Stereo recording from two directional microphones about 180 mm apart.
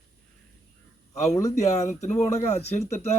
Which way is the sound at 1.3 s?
15° left (ahead or behind).